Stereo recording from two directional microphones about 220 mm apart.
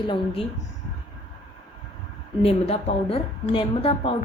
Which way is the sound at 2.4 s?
30° left (ahead or behind).